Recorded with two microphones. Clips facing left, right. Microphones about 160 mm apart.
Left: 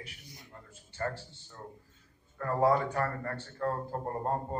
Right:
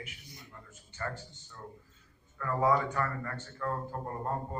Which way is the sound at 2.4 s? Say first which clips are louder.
Left 2 dB; 35° left (ahead or behind).